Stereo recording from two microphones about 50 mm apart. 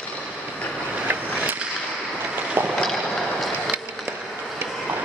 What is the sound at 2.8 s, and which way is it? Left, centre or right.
Boat, centre.